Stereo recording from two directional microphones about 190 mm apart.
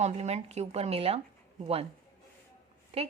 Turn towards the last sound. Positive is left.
turn(degrees=-35)  # may be behind; listen again after turning